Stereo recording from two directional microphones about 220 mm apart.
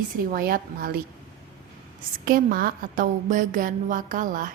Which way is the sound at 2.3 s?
40° right (ahead or behind).